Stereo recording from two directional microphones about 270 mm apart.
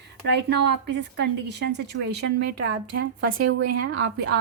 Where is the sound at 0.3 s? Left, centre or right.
Right.